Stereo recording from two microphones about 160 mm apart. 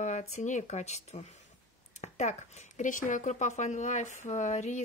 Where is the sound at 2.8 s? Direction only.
55° left (ahead or behind).